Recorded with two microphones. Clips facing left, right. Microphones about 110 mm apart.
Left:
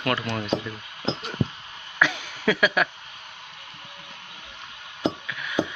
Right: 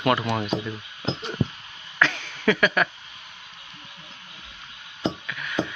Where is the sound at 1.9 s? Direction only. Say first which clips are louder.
Even; 10° left (ahead or behind).